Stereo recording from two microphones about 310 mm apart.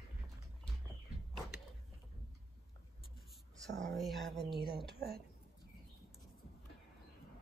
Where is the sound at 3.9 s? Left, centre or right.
Centre.